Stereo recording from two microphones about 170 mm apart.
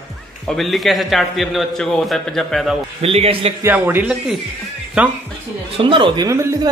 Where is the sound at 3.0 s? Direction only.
35° right (ahead or behind).